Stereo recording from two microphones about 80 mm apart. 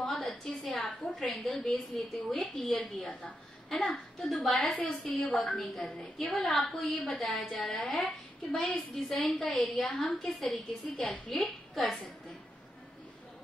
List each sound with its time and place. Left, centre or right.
0.1 s a woman's voice: centre
3.0 s a woman's voice: centre
3.7 s a woman's voice: centre